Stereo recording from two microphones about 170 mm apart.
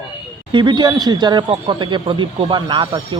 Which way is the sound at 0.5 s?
25° right (ahead or behind).